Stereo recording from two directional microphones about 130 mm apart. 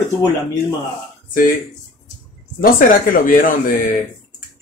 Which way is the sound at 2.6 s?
90° left.